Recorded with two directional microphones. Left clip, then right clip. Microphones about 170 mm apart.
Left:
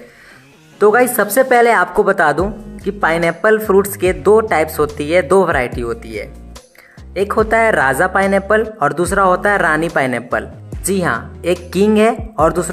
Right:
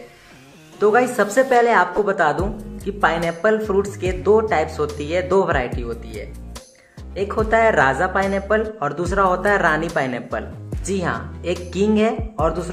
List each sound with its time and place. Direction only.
0.7 s a woman's voice: 35° left (ahead or behind)